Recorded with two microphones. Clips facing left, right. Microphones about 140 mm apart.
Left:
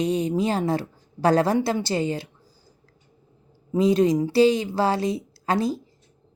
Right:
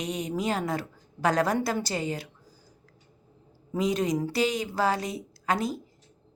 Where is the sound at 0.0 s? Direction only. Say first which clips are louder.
Left 7 dB; 30° left (ahead or behind).